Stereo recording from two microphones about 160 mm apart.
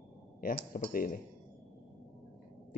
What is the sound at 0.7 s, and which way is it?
Speech, 60° left (ahead or behind).